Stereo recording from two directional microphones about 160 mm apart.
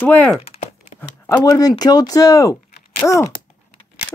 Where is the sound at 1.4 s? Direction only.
25° left (ahead or behind).